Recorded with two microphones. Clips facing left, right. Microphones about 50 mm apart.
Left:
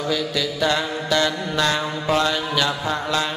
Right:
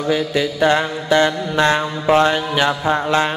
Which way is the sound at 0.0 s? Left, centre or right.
Right.